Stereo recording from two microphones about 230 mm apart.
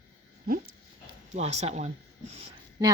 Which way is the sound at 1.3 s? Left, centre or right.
Right.